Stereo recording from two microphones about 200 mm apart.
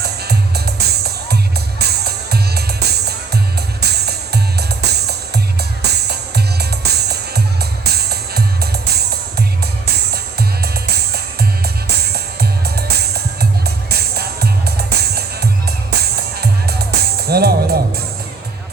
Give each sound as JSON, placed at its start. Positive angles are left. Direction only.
{"t": 0.0, "sound": "music", "side_deg": -55}
{"t": 10.1, "sound": "music", "side_deg": -55}